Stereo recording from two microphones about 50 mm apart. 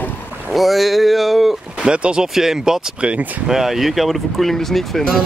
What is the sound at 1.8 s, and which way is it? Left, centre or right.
Speech, centre.